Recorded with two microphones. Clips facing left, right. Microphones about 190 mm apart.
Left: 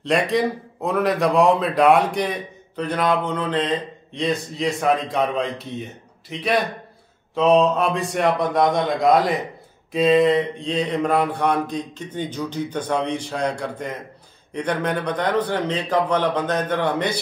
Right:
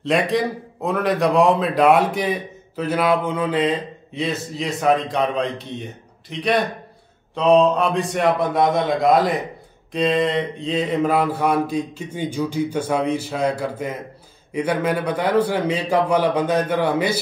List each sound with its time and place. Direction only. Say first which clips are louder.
0.0 s a man's voice: even; centre (ahead or behind)